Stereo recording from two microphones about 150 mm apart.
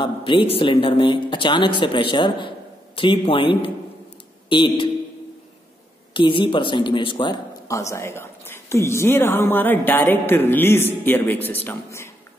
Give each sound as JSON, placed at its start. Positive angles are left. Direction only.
{"t": 0.0, "sound": "speech", "side_deg": 35}
{"t": 6.1, "sound": "speech", "side_deg": 35}
{"t": 7.6, "sound": "a woman's voice", "side_deg": 20}